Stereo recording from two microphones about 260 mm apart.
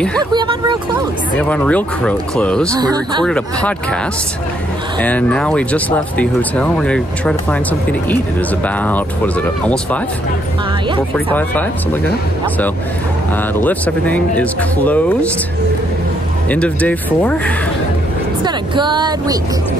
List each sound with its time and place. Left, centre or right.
0.2 s speech: centre
1.4 s speech: centre
2.7 s speech: centre
3.3 s speech: centre
5.0 s speech: centre
8.6 s speech: centre
13.7 s speech: centre
16.4 s speech: centre
18.4 s speech: centre